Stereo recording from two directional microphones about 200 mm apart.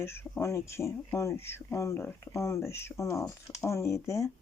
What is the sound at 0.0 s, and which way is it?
Speech, 10° left (ahead or behind).